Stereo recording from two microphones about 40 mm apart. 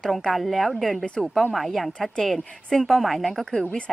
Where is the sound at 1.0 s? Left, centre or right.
Left.